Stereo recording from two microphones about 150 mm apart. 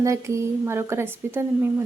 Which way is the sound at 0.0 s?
20° right (ahead or behind).